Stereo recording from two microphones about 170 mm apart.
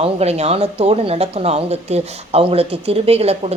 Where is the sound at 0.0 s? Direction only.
40° right (ahead or behind).